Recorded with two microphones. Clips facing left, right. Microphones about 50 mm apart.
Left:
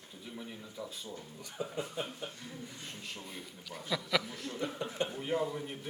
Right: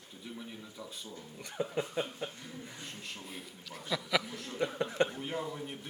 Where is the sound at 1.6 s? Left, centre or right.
Right.